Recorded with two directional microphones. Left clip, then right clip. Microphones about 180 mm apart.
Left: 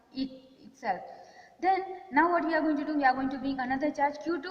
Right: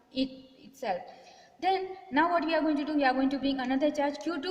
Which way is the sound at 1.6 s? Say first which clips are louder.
Left 1 dB; 55° right (ahead or behind).